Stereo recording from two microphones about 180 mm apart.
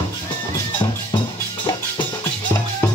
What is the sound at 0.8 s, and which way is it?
Music, 20° left (ahead or behind).